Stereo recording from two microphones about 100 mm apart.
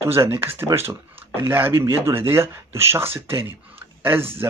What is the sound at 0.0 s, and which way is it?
Speech, 25° right (ahead or behind).